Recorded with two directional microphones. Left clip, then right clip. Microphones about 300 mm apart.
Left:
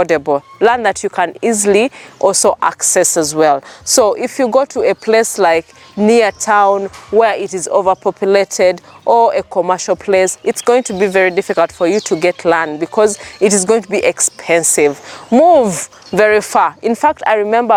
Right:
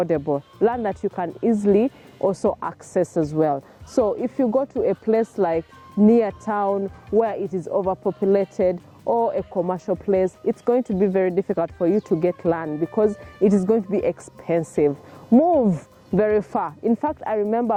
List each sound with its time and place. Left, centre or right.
0.6 s a woman's voice: centre
9.0 s a woman's voice: left